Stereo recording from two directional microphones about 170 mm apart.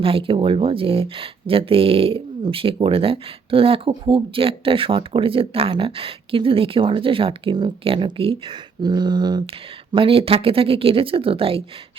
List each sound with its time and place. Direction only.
0.0 s speech: 30° right (ahead or behind)